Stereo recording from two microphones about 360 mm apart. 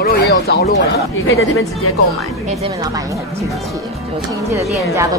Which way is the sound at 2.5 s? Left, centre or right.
Centre.